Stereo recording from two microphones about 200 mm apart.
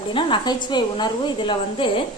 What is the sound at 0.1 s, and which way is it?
A woman's voice, 25° left (ahead or behind).